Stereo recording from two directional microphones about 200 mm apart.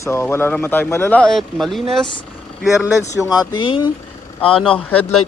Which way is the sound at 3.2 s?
20° left (ahead or behind).